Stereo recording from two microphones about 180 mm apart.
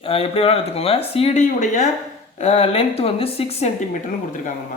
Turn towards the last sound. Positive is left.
turn(degrees=45)  # may be behind; listen again after turning